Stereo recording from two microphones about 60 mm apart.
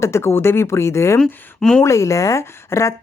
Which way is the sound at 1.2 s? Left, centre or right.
Centre.